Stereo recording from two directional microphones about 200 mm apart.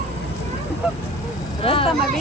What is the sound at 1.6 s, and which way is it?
Speech, 25° left (ahead or behind).